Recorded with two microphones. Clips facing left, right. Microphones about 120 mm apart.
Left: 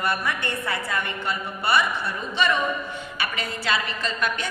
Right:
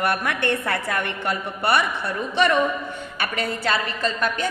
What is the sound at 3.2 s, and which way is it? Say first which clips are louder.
A woman's voice: right 5 dB; 50° right (ahead or behind).